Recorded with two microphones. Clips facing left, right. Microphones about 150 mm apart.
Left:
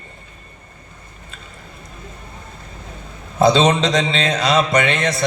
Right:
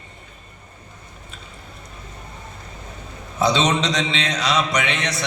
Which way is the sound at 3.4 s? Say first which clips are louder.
Left 5 dB; 50° left (ahead or behind).